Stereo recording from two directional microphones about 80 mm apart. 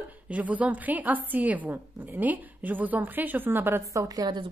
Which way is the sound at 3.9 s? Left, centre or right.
Right.